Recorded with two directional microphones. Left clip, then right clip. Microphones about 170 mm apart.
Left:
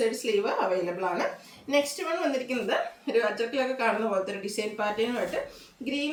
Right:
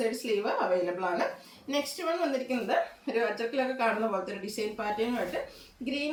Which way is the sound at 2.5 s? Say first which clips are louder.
Left 1 dB; 15° left (ahead or behind).